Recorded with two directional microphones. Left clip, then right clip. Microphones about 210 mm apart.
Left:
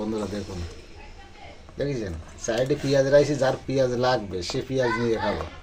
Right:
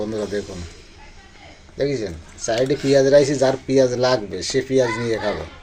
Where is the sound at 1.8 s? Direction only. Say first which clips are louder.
Right 6 dB; 10° right (ahead or behind).